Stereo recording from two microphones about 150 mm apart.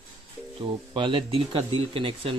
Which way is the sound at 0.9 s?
35° right (ahead or behind).